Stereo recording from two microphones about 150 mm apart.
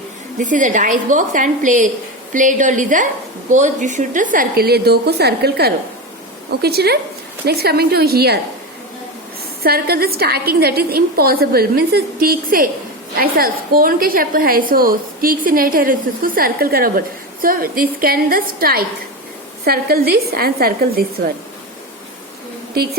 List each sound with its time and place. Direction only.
0.3 s a woman's voice: 60° right (ahead or behind); by 8.4 s 90° right
9.6 s a woman's voice: 90° right
22.8 s a woman's voice: 90° right